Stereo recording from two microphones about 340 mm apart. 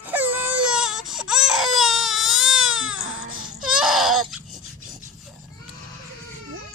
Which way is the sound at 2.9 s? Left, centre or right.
Right.